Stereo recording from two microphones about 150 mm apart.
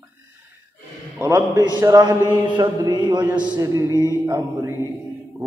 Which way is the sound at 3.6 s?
20° right (ahead or behind).